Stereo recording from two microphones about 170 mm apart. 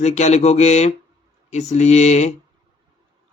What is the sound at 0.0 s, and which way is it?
Speech, 40° left (ahead or behind).